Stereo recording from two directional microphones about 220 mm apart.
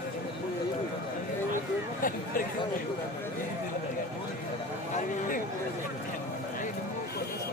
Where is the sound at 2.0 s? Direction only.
40° left (ahead or behind).